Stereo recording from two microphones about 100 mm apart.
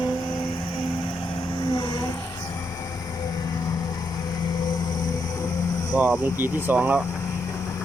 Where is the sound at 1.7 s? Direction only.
50° left (ahead or behind).